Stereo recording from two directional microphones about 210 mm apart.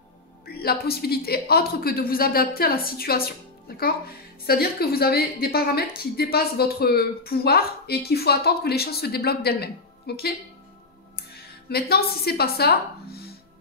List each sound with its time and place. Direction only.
0.5 s a woman's voice: 45° left (ahead or behind)